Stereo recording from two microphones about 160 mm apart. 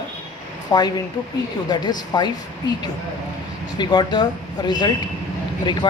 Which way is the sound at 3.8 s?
25° left (ahead or behind).